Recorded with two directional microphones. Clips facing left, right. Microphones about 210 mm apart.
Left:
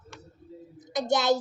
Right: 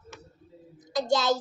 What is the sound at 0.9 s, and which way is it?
Speech, 20° left (ahead or behind).